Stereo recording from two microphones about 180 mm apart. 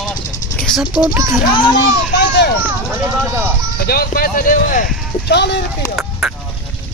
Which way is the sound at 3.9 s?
55° left (ahead or behind).